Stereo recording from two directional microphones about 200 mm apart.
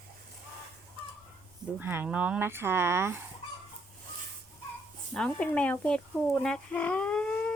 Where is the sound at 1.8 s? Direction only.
10° right (ahead or behind).